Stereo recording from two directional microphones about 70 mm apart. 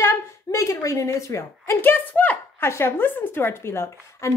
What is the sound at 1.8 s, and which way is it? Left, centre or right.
A woman's voice, left.